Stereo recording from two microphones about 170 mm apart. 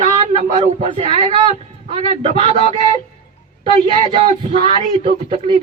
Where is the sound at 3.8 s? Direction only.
30° right (ahead or behind).